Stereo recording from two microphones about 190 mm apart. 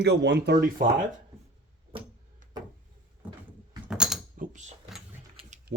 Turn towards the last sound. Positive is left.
turn(degrees=-65)  # may be behind; listen again after turning